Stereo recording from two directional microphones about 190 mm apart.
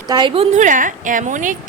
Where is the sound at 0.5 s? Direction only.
40° right (ahead or behind).